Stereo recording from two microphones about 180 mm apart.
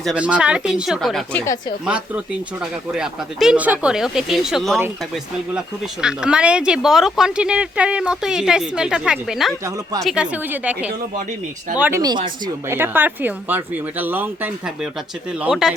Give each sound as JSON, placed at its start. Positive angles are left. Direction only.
{"t": 0.0, "sound": "speech", "side_deg": -5}